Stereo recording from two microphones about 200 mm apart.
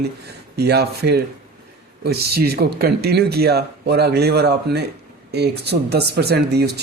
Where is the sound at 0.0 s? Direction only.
55° right (ahead or behind).